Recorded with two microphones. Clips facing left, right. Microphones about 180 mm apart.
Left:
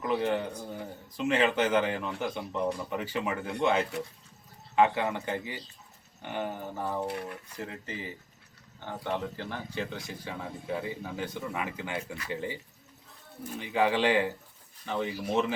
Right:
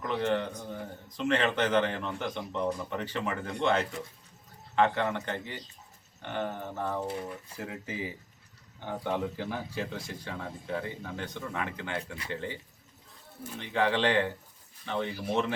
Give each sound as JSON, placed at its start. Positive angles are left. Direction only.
{"t": 0.0, "sound": "a man's voice", "side_deg": 10}
{"t": 7.1, "sound": "speech", "side_deg": 65}
{"t": 7.6, "sound": "a man's voice", "side_deg": -5}
{"t": 13.6, "sound": "a man's voice", "side_deg": 10}